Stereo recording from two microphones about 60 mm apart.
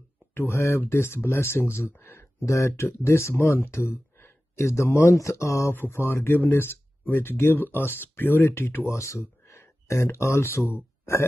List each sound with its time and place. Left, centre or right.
0.3 s speech: left
5.8 s speech: left